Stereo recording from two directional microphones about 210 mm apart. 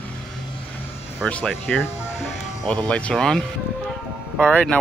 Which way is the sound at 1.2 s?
5° left (ahead or behind).